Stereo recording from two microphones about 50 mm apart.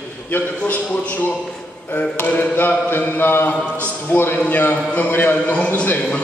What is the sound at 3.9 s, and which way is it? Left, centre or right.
A man's voice, left.